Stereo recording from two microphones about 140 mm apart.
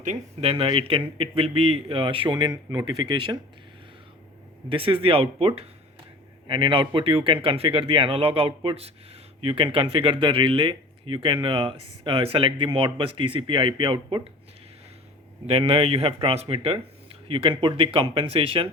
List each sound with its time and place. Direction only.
0.4 s speech: 40° right (ahead or behind)
2.5 s speech: 25° right (ahead or behind)
4.7 s speech: 40° right (ahead or behind)
15.4 s a man's voice: 45° right (ahead or behind)